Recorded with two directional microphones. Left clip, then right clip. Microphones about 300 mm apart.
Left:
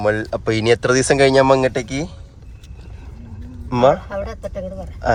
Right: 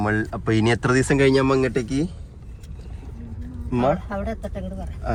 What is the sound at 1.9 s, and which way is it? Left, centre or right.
Speech, left.